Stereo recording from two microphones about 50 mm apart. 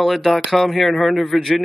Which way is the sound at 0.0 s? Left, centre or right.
Centre.